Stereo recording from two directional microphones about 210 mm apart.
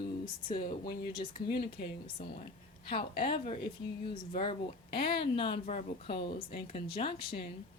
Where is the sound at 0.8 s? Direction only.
45° left (ahead or behind).